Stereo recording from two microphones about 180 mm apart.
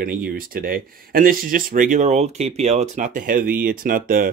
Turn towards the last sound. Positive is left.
turn(degrees=-50)  # may be behind; listen again after turning